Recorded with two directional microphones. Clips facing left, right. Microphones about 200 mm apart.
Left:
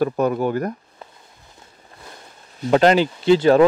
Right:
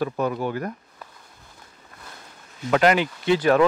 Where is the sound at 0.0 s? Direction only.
45° left (ahead or behind).